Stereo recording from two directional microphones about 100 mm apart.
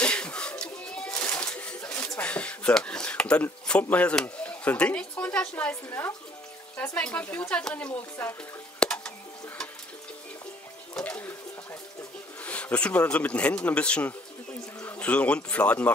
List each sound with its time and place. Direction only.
0.0 s music: 10° left (ahead or behind)
1.1 s a sound: 15° left (ahead or behind)
3.6 s speech: 10° left (ahead or behind)
5.9 s speech: 25° left (ahead or behind)
7.0 s speech: 15° left (ahead or behind)
8.7 s a sound: 10° left (ahead or behind)
11.0 s speech: 15° left (ahead or behind)
12.4 s speech: 15° left (ahead or behind)